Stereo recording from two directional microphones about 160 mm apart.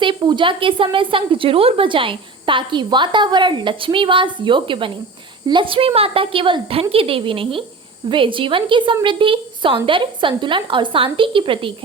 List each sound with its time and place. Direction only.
0.0 s a woman's voice: 30° right (ahead or behind)